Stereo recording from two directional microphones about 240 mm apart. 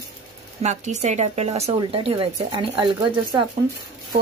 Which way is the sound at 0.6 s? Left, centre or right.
Right.